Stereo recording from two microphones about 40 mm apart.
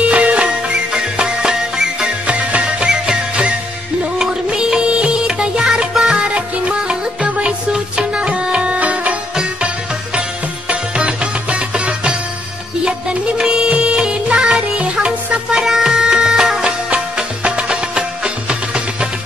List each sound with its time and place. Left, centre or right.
0.1 s music: right
0.9 s music: right
2.2 s music: right; by 6.1 s centre
6.1 s music: right
7.2 s music: right
7.7 s music: right
10.7 s music: right
13.4 s music: right
15.5 s music: centre
16.6 s music: right